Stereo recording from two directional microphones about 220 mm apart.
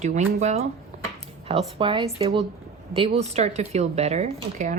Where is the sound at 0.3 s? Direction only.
30° right (ahead or behind).